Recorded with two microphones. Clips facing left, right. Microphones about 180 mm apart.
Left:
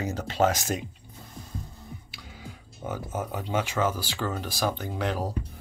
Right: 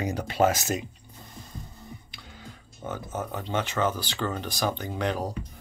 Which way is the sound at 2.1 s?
5° left (ahead or behind).